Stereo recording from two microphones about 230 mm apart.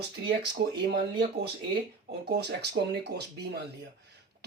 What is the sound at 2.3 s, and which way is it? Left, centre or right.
Speech, right.